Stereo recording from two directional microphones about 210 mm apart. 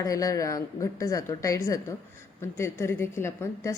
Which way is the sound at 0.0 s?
15° left (ahead or behind).